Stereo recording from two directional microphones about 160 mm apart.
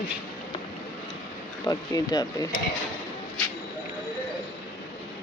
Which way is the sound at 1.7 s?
25° left (ahead or behind).